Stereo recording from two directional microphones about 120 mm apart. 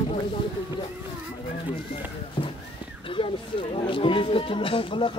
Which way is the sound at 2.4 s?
40° left (ahead or behind).